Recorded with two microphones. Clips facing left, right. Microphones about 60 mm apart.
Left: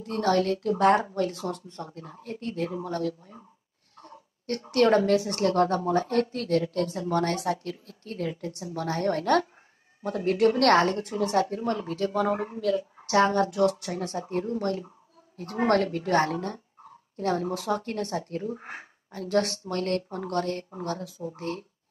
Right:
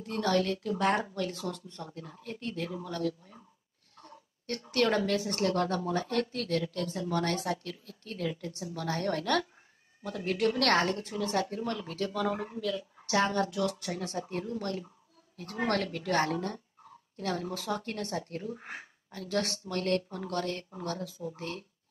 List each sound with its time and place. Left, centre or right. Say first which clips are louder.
0.0 s speech: left 4 dB; left
4.7 s a woman's voice: left 7 dB; left